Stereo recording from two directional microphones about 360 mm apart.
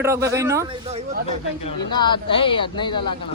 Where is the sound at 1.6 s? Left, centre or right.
Centre.